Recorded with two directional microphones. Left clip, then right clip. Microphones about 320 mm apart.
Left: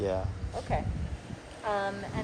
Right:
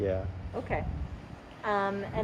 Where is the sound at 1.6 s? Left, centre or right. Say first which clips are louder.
Right 2 dB; right.